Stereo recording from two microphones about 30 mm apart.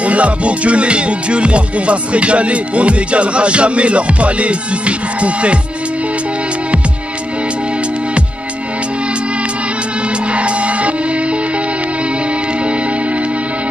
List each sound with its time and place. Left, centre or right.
0.0 s music: right
10.3 s music: right